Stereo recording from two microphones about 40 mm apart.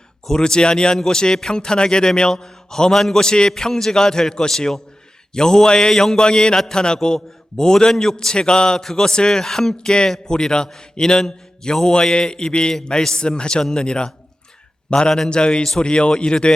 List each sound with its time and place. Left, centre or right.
0.3 s a man's voice: centre